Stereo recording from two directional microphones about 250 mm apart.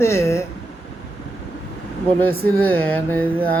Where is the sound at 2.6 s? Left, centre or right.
Centre.